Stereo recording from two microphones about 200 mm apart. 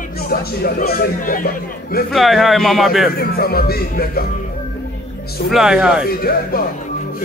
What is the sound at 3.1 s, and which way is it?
Speech, 50° left (ahead or behind).